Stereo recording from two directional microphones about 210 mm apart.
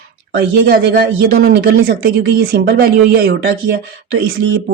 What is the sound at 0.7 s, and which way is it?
Speech, 45° right (ahead or behind).